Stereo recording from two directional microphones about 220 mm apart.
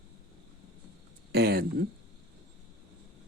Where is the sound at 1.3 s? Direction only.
50° right (ahead or behind).